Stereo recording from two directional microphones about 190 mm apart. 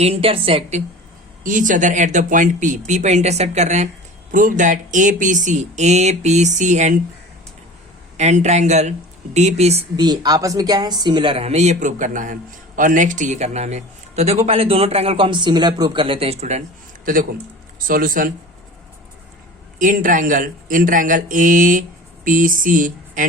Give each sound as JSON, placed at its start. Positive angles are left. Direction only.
{"t": 0.0, "sound": "a woman's voice", "side_deg": -30}
{"t": 1.5, "sound": "speech", "side_deg": -45}
{"t": 8.2, "sound": "speech", "side_deg": -35}
{"t": 10.0, "sound": "speech", "side_deg": -20}
{"t": 17.7, "sound": "speech", "side_deg": -50}
{"t": 19.8, "sound": "speech", "side_deg": -45}